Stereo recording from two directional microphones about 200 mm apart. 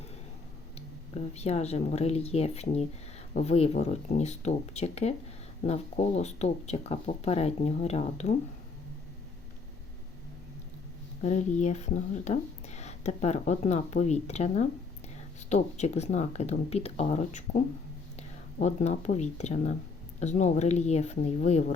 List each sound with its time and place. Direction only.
1.1 s speech: 30° left (ahead or behind)
11.2 s speech: 35° left (ahead or behind)